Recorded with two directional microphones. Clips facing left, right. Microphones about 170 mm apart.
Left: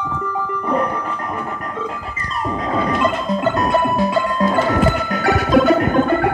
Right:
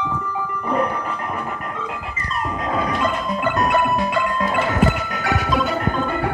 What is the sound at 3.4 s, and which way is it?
Music, 25° left (ahead or behind).